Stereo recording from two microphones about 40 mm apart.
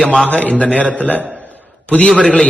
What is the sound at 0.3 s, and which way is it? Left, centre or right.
Speech, left.